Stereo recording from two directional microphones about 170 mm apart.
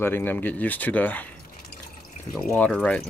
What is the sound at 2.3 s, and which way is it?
Speech, centre (ahead or behind).